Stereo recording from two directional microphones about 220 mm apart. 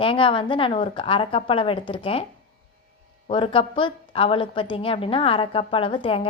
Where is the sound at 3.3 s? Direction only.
25° left (ahead or behind).